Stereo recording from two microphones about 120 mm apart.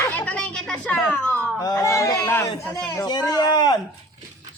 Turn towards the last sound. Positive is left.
turn(degrees=35)  # may be behind; listen again after turning